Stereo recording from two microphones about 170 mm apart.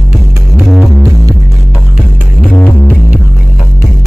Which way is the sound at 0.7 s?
Centre (ahead or behind).